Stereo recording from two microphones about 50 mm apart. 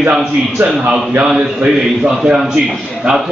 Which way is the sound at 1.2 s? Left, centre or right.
Centre.